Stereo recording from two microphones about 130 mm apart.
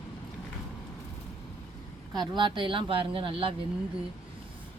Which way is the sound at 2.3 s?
40° right (ahead or behind).